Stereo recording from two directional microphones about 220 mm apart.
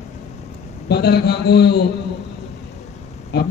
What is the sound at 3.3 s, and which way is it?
Speech, 50° left (ahead or behind).